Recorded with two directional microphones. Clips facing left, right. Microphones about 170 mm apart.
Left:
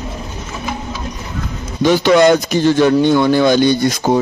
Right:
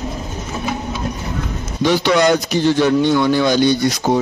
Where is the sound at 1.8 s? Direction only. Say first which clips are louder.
Left 4 dB; 50° left (ahead or behind).